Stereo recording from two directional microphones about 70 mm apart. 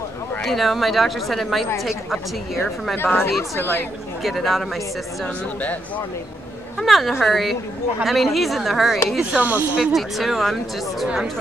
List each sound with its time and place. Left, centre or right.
0.4 s speech: centre
3.0 s speech: left
4.2 s speech: centre
6.8 s speech: centre
9.3 s speech: right
9.9 s speech: centre